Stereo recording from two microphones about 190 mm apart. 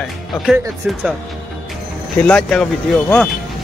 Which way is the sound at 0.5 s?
10° right (ahead or behind).